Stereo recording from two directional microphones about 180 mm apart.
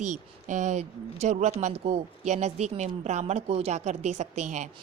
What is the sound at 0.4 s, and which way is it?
Speech, 40° right (ahead or behind).